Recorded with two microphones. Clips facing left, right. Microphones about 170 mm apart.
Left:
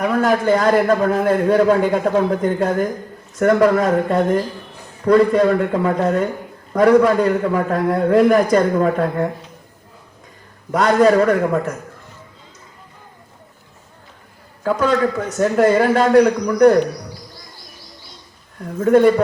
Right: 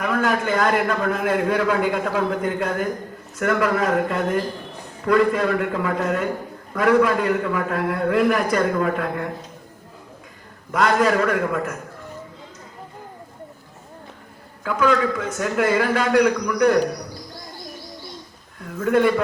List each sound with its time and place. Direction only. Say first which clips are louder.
0.0 s a man's voice: left 5 dB; 35° left (ahead or behind)
10.7 s a man's voice: left 5 dB; 40° left (ahead or behind)
14.6 s a man's voice: left 3 dB; 40° left (ahead or behind)
18.6 s a man's voice: left 6 dB; 40° left (ahead or behind)